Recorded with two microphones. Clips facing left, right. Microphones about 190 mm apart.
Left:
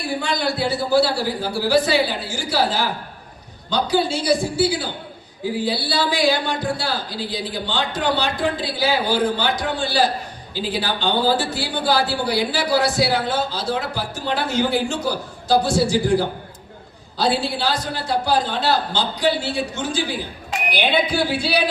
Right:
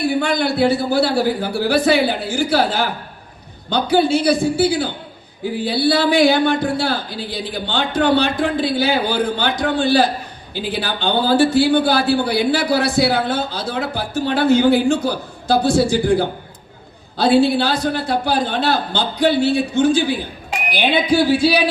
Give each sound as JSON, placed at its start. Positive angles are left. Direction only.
{"t": 0.2, "sound": "a man's voice", "side_deg": -60}